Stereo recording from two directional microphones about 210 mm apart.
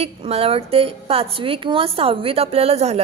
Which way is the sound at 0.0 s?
30° right (ahead or behind).